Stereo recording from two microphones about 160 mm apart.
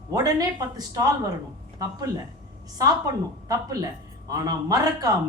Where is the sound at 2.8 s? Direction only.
20° right (ahead or behind).